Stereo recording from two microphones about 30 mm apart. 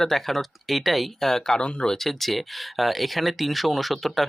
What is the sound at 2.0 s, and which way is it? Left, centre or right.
Speech, centre.